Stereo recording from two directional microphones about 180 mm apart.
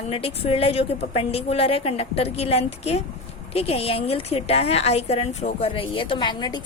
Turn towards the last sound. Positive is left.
turn(degrees=25)  # may be behind; listen again after turning